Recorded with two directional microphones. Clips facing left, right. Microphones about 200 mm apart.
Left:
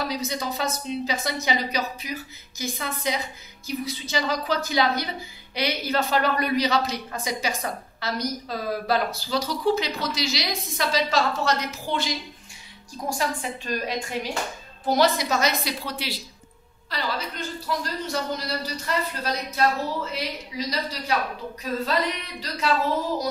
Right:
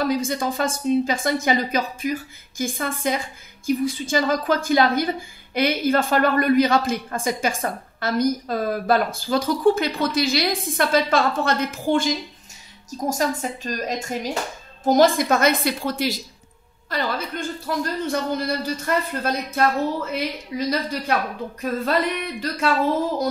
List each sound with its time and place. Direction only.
0.0 s speech: 50° right (ahead or behind)